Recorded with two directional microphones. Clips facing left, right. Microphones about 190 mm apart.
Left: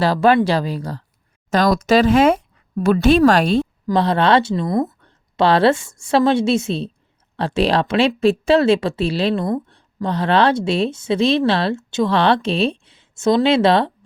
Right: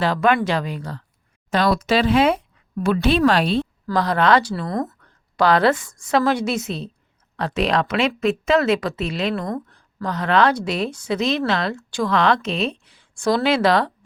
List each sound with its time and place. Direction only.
0.0 s speech: 35° left (ahead or behind)
3.9 s a woman's voice: 25° left (ahead or behind)
4.9 s a woman's voice: 25° left (ahead or behind)